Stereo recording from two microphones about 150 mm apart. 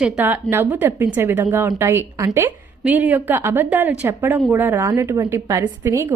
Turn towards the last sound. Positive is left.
turn(degrees=-20)  # may be behind; listen again after turning